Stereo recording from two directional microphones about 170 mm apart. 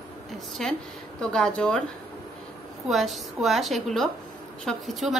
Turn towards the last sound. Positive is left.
turn(degrees=0)  # may be behind; listen again after turning